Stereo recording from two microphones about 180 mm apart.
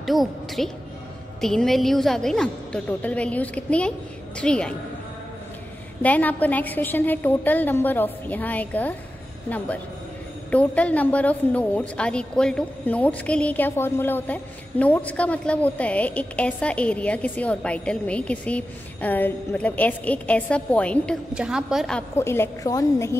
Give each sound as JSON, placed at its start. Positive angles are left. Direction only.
{"t": 0.0, "sound": "a woman's voice", "side_deg": 0}
{"t": 6.0, "sound": "a woman's voice", "side_deg": 10}
{"t": 10.5, "sound": "a woman's voice", "side_deg": 5}
{"t": 22.1, "sound": "a woman's voice", "side_deg": 15}